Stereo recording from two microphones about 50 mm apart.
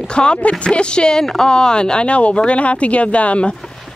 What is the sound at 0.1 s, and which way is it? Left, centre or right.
Speech, centre.